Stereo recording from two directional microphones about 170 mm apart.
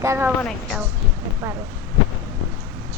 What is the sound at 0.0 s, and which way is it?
Speech, 15° right (ahead or behind).